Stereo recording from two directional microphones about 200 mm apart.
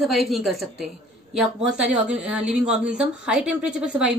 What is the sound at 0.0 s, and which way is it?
A woman's voice, centre (ahead or behind).